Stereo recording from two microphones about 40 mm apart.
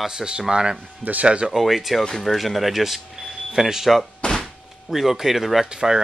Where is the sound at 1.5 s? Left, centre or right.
Centre.